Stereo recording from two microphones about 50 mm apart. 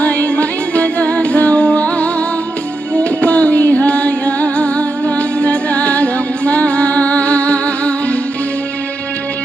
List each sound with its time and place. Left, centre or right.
0.0 s music: left